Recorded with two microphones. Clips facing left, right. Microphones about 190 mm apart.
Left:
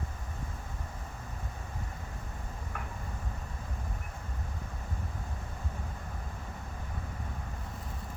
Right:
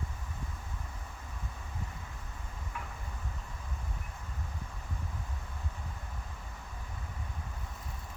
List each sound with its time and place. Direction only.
2.7 s vehicle: 50° left (ahead or behind)